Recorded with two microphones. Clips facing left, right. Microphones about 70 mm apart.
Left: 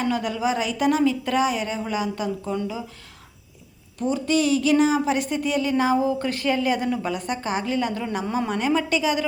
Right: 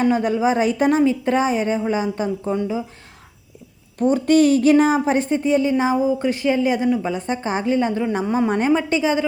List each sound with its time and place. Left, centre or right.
0.0 s speech: right
3.9 s a woman's voice: right
8.4 s a woman's voice: right